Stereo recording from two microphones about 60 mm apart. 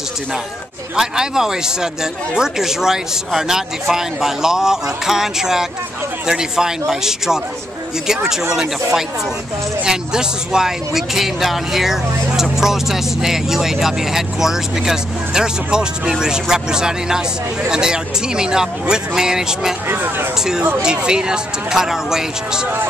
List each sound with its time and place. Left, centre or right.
0.9 s speech: centre
19.9 s speech: right
20.8 s speech: centre